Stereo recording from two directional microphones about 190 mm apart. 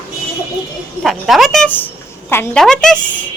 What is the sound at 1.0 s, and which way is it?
A woman's voice, centre (ahead or behind).